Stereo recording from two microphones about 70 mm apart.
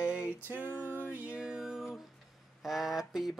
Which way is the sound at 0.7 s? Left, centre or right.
Right.